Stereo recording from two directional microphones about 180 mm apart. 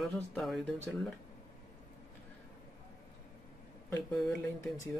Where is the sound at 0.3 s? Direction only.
Centre (ahead or behind).